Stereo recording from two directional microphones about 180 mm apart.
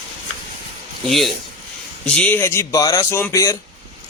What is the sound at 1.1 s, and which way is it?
A man's voice, centre (ahead or behind).